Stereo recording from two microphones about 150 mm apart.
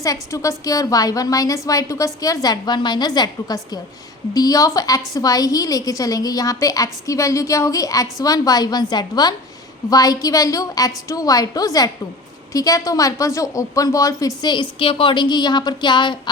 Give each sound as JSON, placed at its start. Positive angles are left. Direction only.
{"t": 0.0, "sound": "a woman's voice", "side_deg": 20}